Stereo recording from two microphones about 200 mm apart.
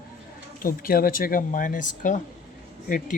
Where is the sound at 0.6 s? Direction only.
45° left (ahead or behind).